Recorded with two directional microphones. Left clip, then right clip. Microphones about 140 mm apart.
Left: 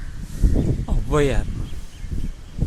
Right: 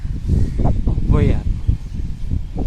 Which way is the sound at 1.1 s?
30° left (ahead or behind).